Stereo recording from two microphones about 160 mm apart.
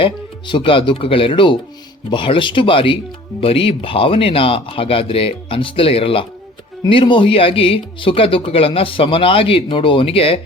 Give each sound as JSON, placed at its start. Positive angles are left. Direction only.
{"t": 0.0, "sound": "speech", "side_deg": 30}